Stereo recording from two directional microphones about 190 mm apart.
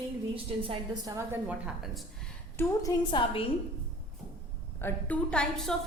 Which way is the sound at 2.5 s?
20° left (ahead or behind).